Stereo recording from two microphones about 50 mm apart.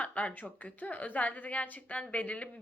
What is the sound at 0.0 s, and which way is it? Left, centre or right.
A woman's voice, left.